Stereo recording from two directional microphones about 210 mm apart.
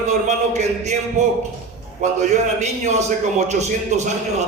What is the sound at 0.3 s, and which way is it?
A man's voice, 35° right (ahead or behind).